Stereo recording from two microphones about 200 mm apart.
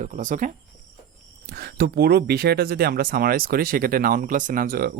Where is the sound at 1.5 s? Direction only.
50° right (ahead or behind).